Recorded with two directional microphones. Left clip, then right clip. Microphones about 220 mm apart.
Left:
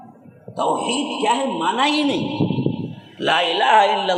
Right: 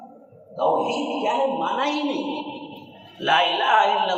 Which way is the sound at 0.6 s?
50° left (ahead or behind).